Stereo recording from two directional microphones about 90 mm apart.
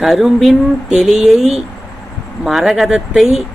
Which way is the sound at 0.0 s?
Centre (ahead or behind).